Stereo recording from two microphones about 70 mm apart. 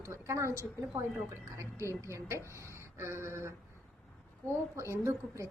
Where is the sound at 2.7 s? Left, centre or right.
Right.